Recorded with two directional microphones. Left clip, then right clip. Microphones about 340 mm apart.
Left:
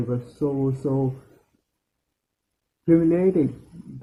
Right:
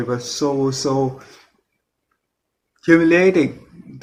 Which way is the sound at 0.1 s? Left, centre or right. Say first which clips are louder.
Right 7 dB; right.